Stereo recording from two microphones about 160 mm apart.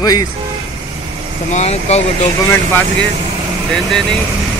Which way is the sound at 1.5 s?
40° left (ahead or behind).